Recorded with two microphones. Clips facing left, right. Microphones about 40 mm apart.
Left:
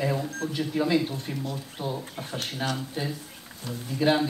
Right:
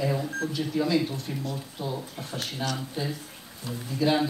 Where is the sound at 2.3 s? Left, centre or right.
Centre.